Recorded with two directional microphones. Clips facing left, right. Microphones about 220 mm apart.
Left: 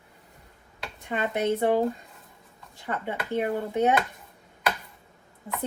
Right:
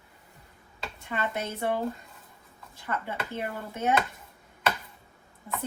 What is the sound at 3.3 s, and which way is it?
Speech, 15° left (ahead or behind).